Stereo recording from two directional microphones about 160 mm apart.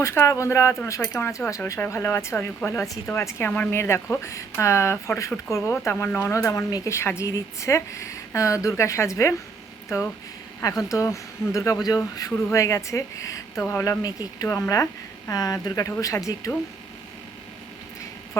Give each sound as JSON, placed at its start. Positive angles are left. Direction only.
{"t": 0.0, "sound": "a woman's voice", "side_deg": 15}
{"t": 10.6, "sound": "speech", "side_deg": 20}